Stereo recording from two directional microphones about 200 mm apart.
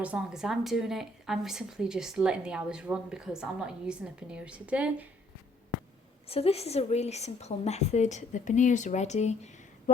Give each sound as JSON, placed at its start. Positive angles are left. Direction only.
{"t": 0.0, "sound": "a woman's voice", "side_deg": -5}
{"t": 6.2, "sound": "a woman's voice", "side_deg": 30}